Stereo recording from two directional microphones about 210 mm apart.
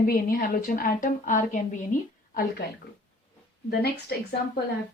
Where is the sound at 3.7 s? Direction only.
50° left (ahead or behind).